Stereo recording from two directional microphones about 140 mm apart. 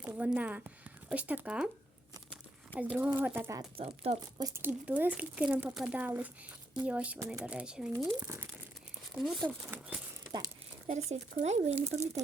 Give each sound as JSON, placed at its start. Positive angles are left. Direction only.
{"t": 0.0, "sound": "speech", "side_deg": -10}
{"t": 2.9, "sound": "speech", "side_deg": -10}
{"t": 3.8, "sound": "speech", "side_deg": -45}
{"t": 4.4, "sound": "speech", "side_deg": -25}
{"t": 4.6, "sound": "speech", "side_deg": -10}
{"t": 9.1, "sound": "speech", "side_deg": 0}
{"t": 9.4, "sound": "speech", "side_deg": -15}
{"t": 10.8, "sound": "speech", "side_deg": -55}